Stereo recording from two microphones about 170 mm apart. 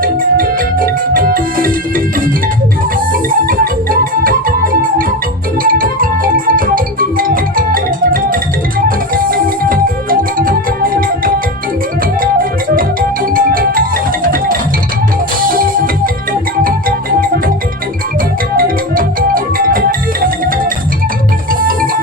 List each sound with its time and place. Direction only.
0.0 s music: 55° right (ahead or behind)
3.1 s music: 55° right (ahead or behind)
18.5 s music: 55° right (ahead or behind)
21.6 s music: 55° right (ahead or behind)